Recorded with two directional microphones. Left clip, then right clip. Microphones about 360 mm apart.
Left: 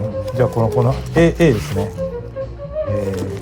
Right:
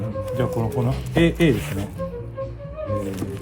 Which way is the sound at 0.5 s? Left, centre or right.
Left.